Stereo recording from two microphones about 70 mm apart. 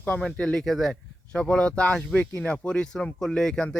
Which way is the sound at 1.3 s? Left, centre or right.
Centre.